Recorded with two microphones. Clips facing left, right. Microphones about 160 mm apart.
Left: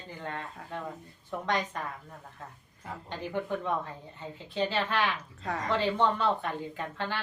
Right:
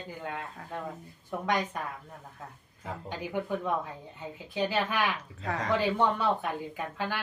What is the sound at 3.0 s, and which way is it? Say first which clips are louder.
Speech: even; 10° right (ahead or behind).